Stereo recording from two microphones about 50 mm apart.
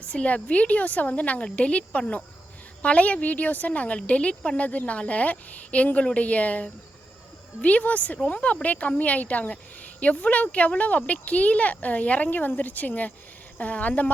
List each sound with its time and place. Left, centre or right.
0.0 s a woman's voice: left